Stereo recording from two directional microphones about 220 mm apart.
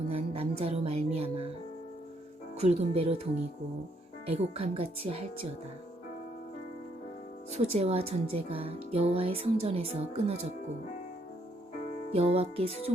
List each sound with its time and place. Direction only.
0.1 s speech: 25° right (ahead or behind)
2.6 s speech: 30° right (ahead or behind)
4.3 s speech: 25° right (ahead or behind)
7.5 s speech: 30° right (ahead or behind)
12.1 s speech: 25° right (ahead or behind)